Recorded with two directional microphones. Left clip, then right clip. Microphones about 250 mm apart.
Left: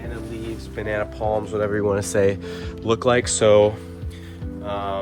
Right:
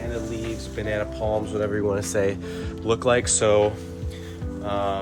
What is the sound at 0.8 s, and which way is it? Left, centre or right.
Speech, centre.